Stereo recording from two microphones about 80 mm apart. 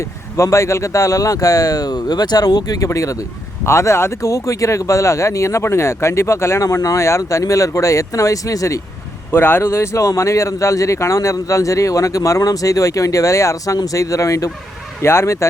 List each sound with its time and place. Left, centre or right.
0.0 s speech: left
9.3 s speech: left